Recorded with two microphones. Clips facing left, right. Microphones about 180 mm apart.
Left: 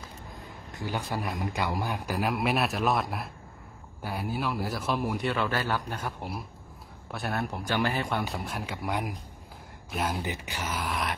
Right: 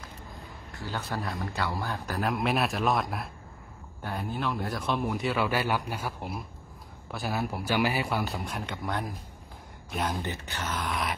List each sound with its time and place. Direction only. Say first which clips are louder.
0.7 s a man's voice: left 2 dB; 15° left (ahead or behind)